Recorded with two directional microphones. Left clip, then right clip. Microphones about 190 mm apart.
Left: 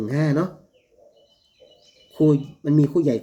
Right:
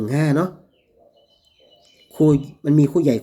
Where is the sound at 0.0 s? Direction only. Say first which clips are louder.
Right 3 dB; 20° right (ahead or behind).